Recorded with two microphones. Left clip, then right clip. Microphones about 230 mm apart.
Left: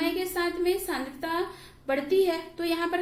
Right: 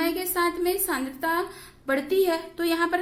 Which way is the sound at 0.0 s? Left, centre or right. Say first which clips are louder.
Right 3 dB; right.